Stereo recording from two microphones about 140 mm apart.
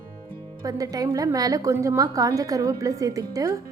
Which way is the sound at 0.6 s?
25° right (ahead or behind).